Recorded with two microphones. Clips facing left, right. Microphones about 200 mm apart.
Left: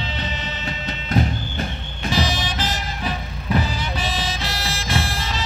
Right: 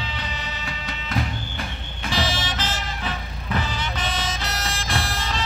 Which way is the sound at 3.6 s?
5° left (ahead or behind).